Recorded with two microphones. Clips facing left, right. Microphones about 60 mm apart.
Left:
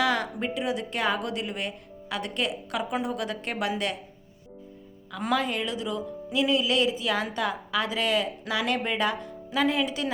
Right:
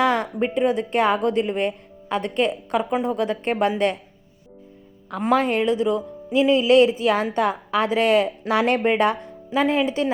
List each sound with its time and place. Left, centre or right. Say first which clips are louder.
0.0 s speech: right 6 dB; right
5.2 s speech: right 8 dB; right